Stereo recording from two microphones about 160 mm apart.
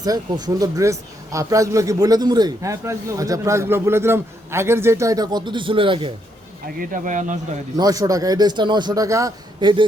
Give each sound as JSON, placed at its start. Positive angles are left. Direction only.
{"t": 0.0, "sound": "speech", "side_deg": -25}
{"t": 6.7, "sound": "speech", "side_deg": -55}
{"t": 7.8, "sound": "speech", "side_deg": -20}